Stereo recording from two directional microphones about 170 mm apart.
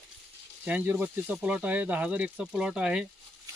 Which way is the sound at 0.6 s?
10° right (ahead or behind).